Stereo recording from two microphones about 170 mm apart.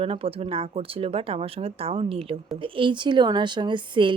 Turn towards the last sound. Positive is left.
turn(degrees=-30)  # may be behind; listen again after turning